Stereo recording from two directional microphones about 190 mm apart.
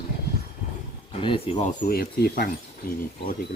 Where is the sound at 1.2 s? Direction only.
30° left (ahead or behind).